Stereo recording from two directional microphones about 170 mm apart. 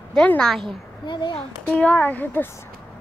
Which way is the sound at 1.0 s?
25° left (ahead or behind).